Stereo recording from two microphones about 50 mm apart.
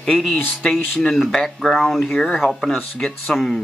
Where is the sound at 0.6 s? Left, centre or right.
Centre.